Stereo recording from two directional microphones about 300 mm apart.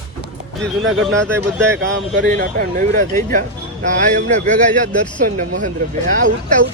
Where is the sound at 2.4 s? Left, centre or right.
Right.